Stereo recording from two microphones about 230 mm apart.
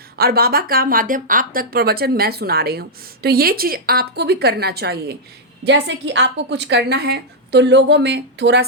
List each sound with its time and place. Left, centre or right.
0.2 s a woman's voice: right